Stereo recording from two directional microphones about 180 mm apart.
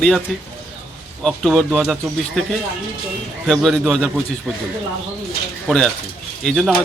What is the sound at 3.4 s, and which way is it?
Speech, centre (ahead or behind).